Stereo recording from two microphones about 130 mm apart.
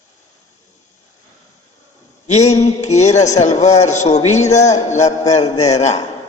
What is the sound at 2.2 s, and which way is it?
A man's voice, 60° left (ahead or behind).